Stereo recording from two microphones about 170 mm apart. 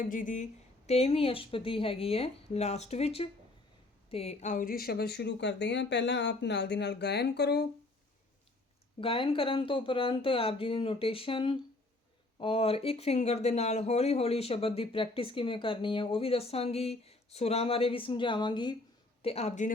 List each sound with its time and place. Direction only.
0.0 s a sound: 50° left (ahead or behind)
0.9 s speech: 35° left (ahead or behind); by 7.7 s 75° left (ahead or behind)
9.0 s speech: 30° left (ahead or behind)
19.2 s speech: 35° left (ahead or behind)